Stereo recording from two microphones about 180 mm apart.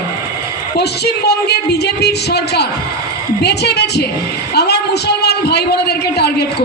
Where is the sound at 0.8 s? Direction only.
65° left (ahead or behind).